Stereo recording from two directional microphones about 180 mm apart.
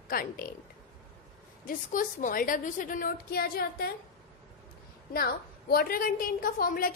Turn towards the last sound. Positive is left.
turn(degrees=55)  # may be behind; listen again after turning